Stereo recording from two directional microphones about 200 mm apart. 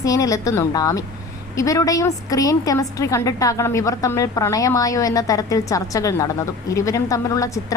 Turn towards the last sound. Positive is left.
turn(degrees=15)  # may be behind; listen again after turning